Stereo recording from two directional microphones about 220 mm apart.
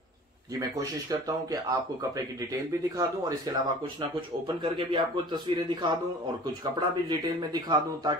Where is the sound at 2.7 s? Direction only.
15° right (ahead or behind).